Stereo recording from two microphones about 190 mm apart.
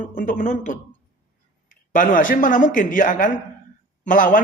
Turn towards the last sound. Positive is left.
turn(degrees=45)  # may be behind; listen again after turning